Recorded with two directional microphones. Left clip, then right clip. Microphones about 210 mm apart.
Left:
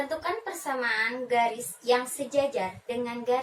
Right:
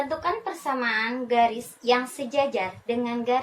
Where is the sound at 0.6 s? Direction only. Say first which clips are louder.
Right 2 dB; 15° right (ahead or behind).